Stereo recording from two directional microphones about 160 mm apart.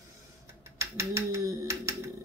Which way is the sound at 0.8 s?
20° right (ahead or behind).